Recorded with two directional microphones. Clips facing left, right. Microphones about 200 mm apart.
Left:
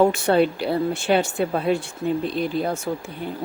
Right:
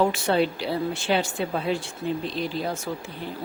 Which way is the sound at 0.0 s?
50° left (ahead or behind).